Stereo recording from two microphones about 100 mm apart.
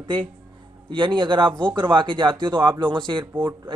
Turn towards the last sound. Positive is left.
turn(degrees=-20)  # may be behind; listen again after turning